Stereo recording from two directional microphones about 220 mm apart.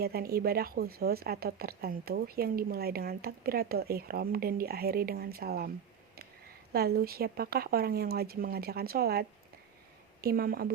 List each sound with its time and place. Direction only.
0.0 s a woman's voice: 45° right (ahead or behind)
6.7 s a woman's voice: 45° right (ahead or behind)